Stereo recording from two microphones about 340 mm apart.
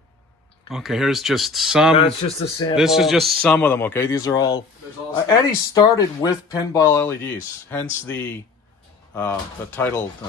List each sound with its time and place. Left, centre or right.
0.7 s a man's voice: centre
2.0 s speech: centre
2.7 s a man's voice: centre